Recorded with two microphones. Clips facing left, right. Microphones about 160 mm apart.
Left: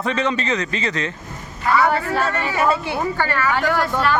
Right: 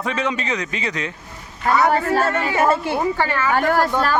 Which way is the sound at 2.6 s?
50° right (ahead or behind).